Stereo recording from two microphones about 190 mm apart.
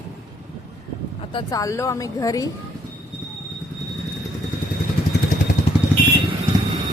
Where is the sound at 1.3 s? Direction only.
20° left (ahead or behind).